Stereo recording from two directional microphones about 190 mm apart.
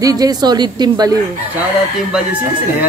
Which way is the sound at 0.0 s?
20° right (ahead or behind).